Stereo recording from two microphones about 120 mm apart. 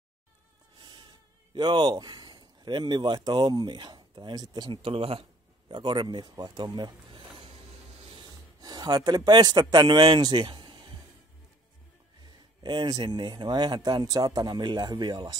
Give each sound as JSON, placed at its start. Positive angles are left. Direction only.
{"t": 0.7, "sound": "speech", "side_deg": -40}
{"t": 4.8, "sound": "speech", "side_deg": -50}
{"t": 5.7, "sound": "speech", "side_deg": -40}
{"t": 8.0, "sound": "a sound", "side_deg": -45}
{"t": 12.6, "sound": "speech", "side_deg": -35}